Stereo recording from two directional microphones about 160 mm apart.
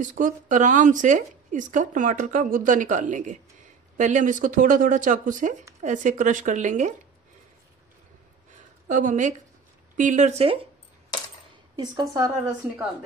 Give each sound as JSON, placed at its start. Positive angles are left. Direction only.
{"t": 0.0, "sound": "speech", "side_deg": -50}
{"t": 8.8, "sound": "speech", "side_deg": -50}
{"t": 11.7, "sound": "speech", "side_deg": -25}